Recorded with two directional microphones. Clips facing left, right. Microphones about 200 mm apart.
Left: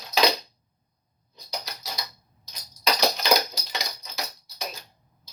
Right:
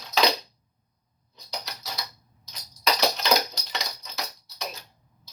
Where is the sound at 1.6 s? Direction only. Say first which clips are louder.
Even; centre (ahead or behind).